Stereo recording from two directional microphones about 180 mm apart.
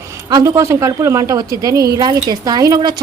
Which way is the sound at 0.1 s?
20° right (ahead or behind).